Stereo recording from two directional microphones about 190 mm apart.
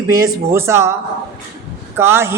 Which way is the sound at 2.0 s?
15° right (ahead or behind).